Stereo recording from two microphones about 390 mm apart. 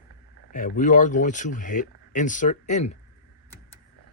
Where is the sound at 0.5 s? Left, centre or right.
Centre.